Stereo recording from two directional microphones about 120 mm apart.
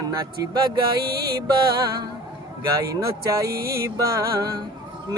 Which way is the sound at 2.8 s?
25° right (ahead or behind).